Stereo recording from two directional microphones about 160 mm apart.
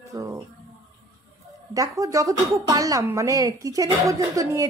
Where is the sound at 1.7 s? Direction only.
20° right (ahead or behind).